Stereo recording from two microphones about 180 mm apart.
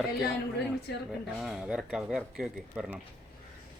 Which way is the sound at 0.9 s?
65° left (ahead or behind).